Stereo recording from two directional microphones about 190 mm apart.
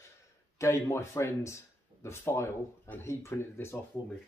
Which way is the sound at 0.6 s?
15° left (ahead or behind).